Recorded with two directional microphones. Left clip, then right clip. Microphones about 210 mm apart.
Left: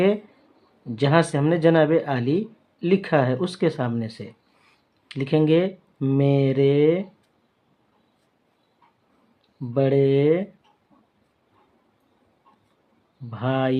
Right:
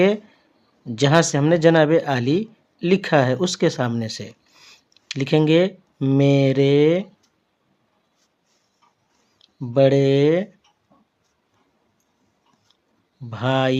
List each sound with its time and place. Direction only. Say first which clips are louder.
0.9 s speech: right 3 dB; 35° right (ahead or behind)
9.4 s speech: right 7 dB; 40° right (ahead or behind)
13.3 s speech: right 4 dB; 40° right (ahead or behind)